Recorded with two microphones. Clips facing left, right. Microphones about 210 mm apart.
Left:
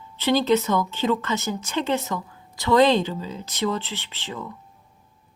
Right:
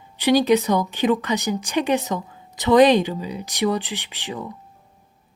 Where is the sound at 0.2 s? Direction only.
15° right (ahead or behind).